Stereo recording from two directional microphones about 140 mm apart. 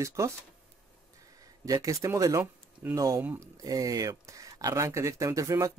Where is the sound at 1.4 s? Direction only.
25° right (ahead or behind).